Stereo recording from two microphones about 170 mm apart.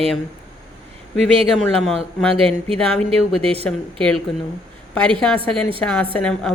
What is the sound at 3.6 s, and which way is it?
Speech, 5° left (ahead or behind).